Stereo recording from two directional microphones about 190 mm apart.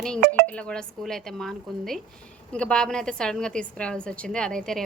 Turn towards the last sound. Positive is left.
turn(degrees=5)  # may be behind; listen again after turning